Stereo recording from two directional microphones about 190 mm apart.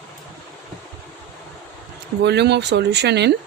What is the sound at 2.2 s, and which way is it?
Speech, 65° right (ahead or behind).